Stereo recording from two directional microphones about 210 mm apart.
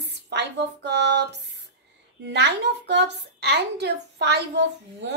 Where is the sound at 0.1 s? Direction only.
55° right (ahead or behind).